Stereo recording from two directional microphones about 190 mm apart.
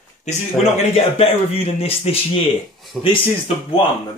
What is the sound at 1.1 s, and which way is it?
Speech, 30° left (ahead or behind).